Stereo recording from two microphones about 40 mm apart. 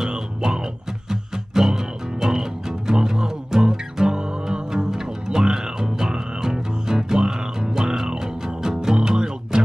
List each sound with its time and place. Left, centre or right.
0.0 s music: centre